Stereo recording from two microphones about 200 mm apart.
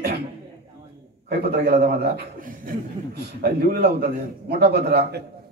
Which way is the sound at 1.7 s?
50° right (ahead or behind).